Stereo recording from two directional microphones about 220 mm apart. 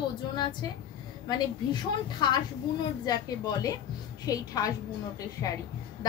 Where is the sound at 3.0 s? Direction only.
15° left (ahead or behind).